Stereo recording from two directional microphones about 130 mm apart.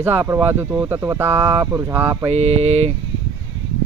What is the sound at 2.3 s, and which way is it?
Speech, 55° right (ahead or behind).